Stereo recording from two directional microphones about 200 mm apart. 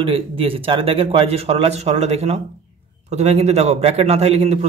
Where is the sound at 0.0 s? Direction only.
25° right (ahead or behind).